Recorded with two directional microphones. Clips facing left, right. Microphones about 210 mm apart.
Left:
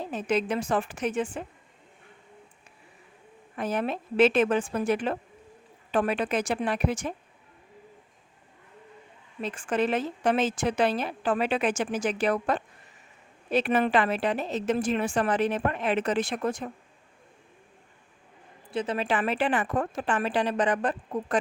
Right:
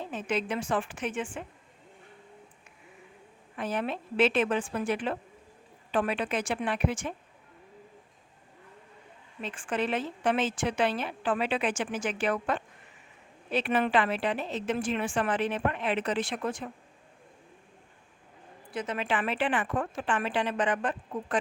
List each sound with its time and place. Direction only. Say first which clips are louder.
0.0 s a woman's voice: left 4 dB; 40° left (ahead or behind)
3.5 s a woman's voice: left 3 dB; 45° left (ahead or behind)
9.4 s a woman's voice: left 4 dB; 40° left (ahead or behind)
18.7 s a woman's voice: left 4 dB; 30° left (ahead or behind)